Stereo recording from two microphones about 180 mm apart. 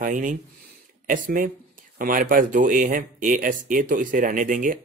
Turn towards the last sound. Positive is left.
turn(degrees=-45)  # may be behind; listen again after turning